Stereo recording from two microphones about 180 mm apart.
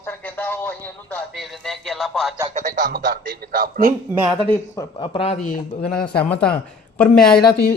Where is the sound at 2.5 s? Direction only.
45° right (ahead or behind).